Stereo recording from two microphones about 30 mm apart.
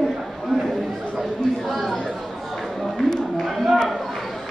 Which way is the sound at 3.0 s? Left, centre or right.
Centre.